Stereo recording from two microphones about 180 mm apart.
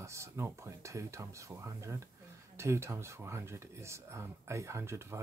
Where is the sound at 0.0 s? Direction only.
15° right (ahead or behind).